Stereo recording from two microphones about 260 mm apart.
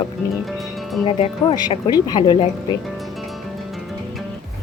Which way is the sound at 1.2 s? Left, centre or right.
Centre.